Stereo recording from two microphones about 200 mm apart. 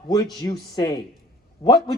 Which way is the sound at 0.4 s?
20° left (ahead or behind).